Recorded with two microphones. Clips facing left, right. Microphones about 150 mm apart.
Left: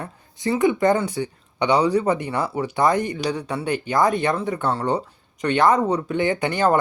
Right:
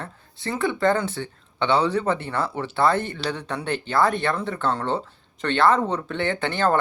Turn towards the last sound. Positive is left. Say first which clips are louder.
# left 3 dB
turn(degrees=15)  # may be behind; listen again after turning